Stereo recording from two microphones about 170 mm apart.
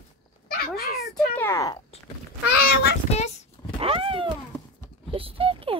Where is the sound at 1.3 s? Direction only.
15° left (ahead or behind).